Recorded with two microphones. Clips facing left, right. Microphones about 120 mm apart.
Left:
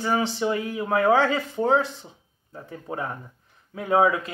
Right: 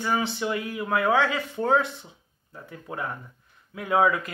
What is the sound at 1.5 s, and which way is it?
Speech, 25° left (ahead or behind).